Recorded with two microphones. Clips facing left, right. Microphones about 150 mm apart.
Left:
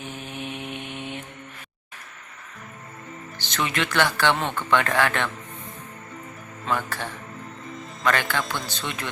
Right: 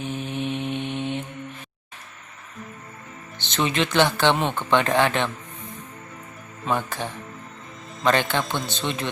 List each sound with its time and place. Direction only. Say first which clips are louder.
0.0 s mantra: right 6 dB; 20° right (ahead or behind)
3.3 s speech: right 3 dB; 25° right (ahead or behind)
6.7 s speech: right 2 dB; 20° right (ahead or behind)